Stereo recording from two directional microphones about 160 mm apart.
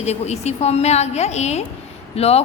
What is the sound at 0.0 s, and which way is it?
A woman's voice, 45° left (ahead or behind).